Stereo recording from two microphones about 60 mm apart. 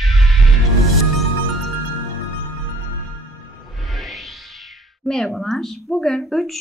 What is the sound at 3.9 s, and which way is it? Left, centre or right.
Music, centre.